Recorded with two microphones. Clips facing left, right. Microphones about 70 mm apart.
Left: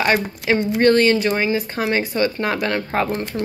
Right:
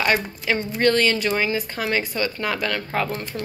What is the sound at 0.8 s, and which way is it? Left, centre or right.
A woman's voice, left.